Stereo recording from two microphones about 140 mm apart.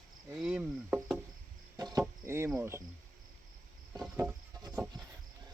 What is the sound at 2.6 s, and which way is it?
Speech, 20° right (ahead or behind).